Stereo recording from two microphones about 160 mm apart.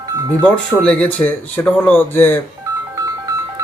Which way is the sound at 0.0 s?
25° right (ahead or behind).